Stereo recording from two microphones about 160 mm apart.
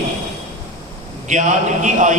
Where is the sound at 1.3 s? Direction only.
50° right (ahead or behind).